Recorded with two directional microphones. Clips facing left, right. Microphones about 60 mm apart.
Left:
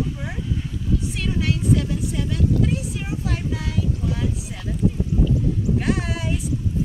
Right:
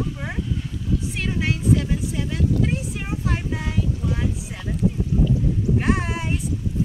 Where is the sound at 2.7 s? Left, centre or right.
Right.